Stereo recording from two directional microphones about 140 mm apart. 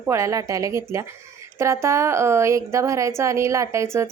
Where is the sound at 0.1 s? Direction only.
20° right (ahead or behind).